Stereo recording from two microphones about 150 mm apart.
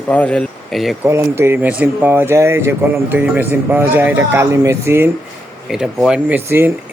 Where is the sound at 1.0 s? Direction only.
15° right (ahead or behind).